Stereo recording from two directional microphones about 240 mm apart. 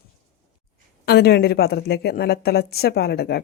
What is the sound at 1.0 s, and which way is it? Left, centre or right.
A woman's voice, left.